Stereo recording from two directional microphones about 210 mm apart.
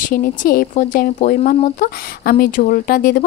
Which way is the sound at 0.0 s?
40° left (ahead or behind).